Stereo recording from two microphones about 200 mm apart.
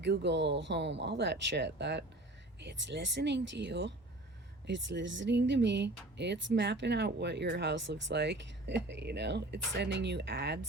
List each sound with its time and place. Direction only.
0.0 s speech: 60° right (ahead or behind)